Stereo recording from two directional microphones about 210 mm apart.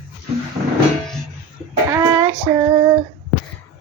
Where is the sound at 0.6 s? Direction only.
15° right (ahead or behind).